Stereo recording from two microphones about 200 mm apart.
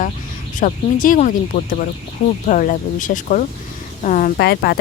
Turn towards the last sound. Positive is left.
turn(degrees=55)  # may be behind; listen again after turning